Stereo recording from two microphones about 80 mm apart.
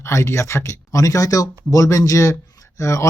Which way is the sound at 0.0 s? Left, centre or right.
Left.